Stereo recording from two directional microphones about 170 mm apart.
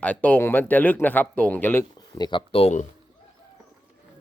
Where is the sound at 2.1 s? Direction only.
25° left (ahead or behind).